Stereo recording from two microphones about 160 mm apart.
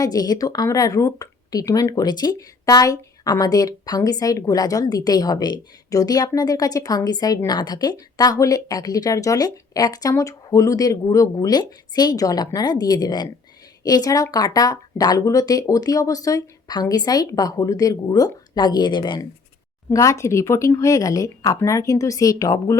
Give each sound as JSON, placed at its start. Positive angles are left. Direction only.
{"t": 0.0, "sound": "speech", "side_deg": 25}